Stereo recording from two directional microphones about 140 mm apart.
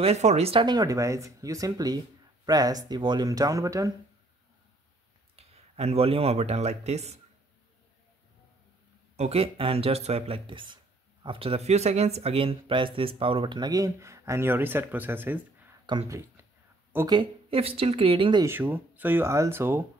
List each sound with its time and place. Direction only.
0.0 s speech: 50° right (ahead or behind)
0.7 s speech: 25° right (ahead or behind)
5.3 s speech: 50° right (ahead or behind)
9.1 s speech: 50° right (ahead or behind); by 16.4 s 20° right (ahead or behind)
17.0 s speech: 35° right (ahead or behind)
18.4 s speech: 15° right (ahead or behind)